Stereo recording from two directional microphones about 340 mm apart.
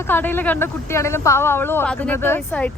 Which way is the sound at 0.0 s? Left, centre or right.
Centre.